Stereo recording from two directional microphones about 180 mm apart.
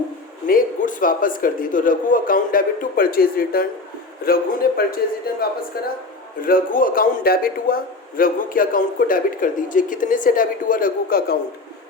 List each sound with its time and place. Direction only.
0.4 s a man's voice: 50° left (ahead or behind)